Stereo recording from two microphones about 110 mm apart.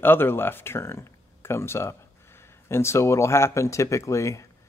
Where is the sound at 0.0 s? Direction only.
20° left (ahead or behind).